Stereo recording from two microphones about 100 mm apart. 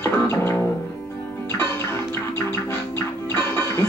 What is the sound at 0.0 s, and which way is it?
Music, 25° left (ahead or behind).